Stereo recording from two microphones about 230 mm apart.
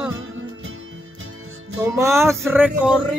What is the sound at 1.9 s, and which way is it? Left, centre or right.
Music, centre.